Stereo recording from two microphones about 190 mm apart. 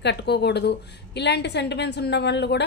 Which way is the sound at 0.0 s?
65° left (ahead or behind).